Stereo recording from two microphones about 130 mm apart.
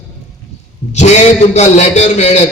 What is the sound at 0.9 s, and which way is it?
A man's voice, 60° left (ahead or behind).